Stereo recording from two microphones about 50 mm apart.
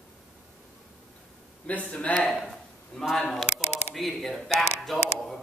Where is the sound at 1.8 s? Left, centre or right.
Left.